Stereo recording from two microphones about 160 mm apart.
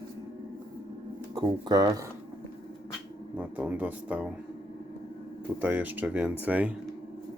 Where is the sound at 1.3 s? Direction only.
25° right (ahead or behind).